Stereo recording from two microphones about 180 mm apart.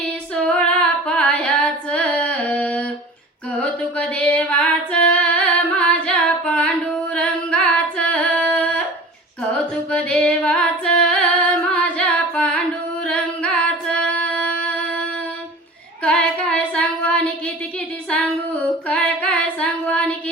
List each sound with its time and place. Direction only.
0.4 s female singing: 5° left (ahead or behind)
7.1 s singing: 5° left (ahead or behind)
9.9 s music: 5° left (ahead or behind)
11.7 s carnatic music: 5° left (ahead or behind)
13.1 s singing: 5° left (ahead or behind)
16.0 s female singing: 5° left (ahead or behind)
18.9 s female singing: 5° left (ahead or behind)